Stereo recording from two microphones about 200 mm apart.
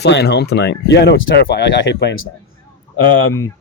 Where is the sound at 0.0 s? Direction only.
55° left (ahead or behind); by 2.3 s 75° left (ahead or behind).